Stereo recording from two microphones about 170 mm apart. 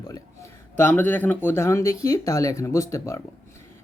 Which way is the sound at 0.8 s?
10° left (ahead or behind).